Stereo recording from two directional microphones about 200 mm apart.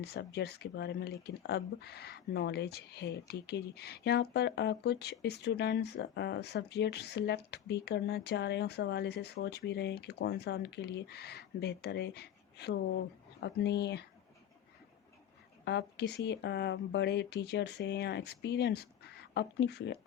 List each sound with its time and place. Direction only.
0.0 s speech: 55° left (ahead or behind)
15.6 s speech: 55° left (ahead or behind)